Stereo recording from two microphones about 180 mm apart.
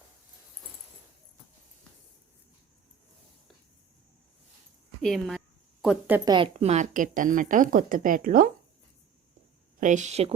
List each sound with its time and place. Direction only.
5.0 s a woman's voice: centre (ahead or behind)
6.2 s a woman's voice: 25° right (ahead or behind); by 8.4 s 50° right (ahead or behind)
9.8 s a woman's voice: 45° right (ahead or behind)